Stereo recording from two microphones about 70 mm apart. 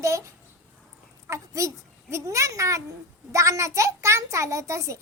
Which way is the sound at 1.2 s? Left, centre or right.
Right.